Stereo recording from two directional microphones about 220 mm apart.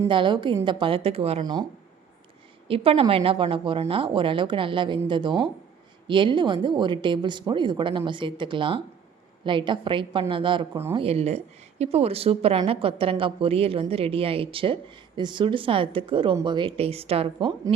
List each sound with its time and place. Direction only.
0.0 s a woman's voice: 20° right (ahead or behind)
2.6 s a woman's voice: 25° right (ahead or behind)